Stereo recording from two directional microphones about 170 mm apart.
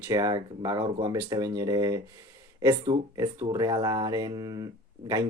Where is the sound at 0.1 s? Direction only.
20° right (ahead or behind).